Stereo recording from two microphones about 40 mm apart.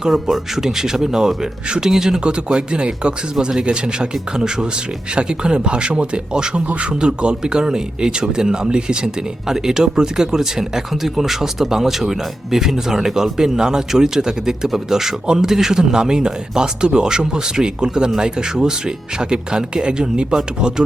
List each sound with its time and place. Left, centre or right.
0.1 s speech: centre